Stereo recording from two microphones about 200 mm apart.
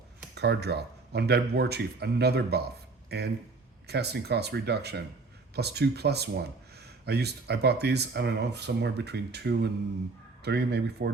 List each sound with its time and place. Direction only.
0.3 s speech: 55° right (ahead or behind)